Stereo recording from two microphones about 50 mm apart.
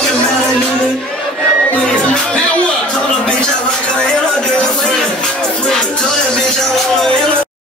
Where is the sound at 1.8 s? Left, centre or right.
Centre.